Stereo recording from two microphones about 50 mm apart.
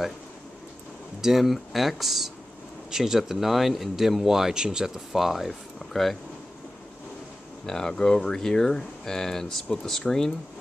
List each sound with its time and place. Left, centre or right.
1.2 s speech: centre
7.6 s speech: centre